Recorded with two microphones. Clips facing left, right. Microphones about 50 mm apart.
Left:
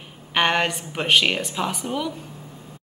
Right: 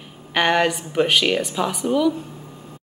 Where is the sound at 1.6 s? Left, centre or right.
Centre.